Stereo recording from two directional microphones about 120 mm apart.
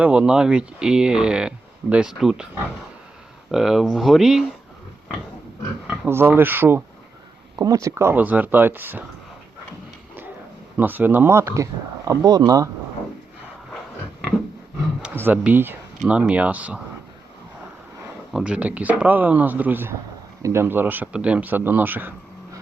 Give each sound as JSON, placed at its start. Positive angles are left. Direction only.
{"t": 0.0, "sound": "speech", "side_deg": -10}
{"t": 3.5, "sound": "speech", "side_deg": -5}
{"t": 6.1, "sound": "speech", "side_deg": -20}
{"t": 7.5, "sound": "speech", "side_deg": -25}
{"t": 10.8, "sound": "speech", "side_deg": -15}
{"t": 15.0, "sound": "speech", "side_deg": -15}
{"t": 18.3, "sound": "speech", "side_deg": -10}